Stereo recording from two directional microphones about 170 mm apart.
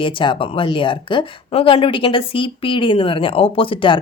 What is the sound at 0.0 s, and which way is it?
Speech, 30° left (ahead or behind).